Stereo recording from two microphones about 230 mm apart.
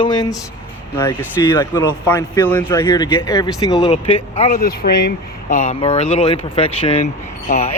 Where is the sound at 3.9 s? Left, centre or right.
Left.